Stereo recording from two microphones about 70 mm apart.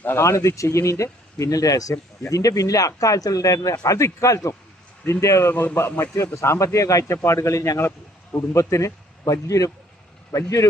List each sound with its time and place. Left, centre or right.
0.2 s speech: left
5.5 s a man's voice: left